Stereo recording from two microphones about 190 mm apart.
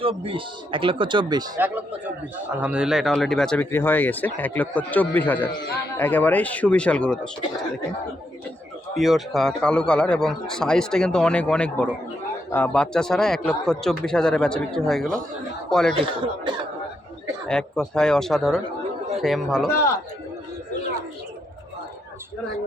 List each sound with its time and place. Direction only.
0.0 s speech: 25° right (ahead or behind)
1.5 s speech: 10° right (ahead or behind)
9.0 s a man's voice: centre (ahead or behind)
16.0 s speech: 25° right (ahead or behind)
17.5 s a man's voice: 5° left (ahead or behind)